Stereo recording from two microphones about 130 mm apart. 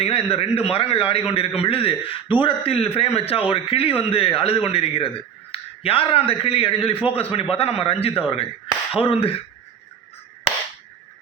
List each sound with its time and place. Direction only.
0.0 s a man's voice: 45° left (ahead or behind)